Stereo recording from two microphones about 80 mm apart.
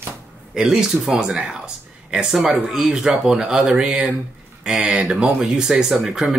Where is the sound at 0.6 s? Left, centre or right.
Centre.